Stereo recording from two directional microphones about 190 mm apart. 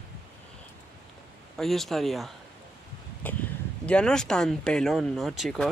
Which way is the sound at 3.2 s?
10° left (ahead or behind).